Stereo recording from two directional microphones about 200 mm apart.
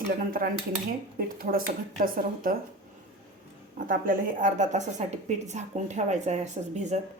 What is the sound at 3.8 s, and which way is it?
A woman's voice, 45° right (ahead or behind).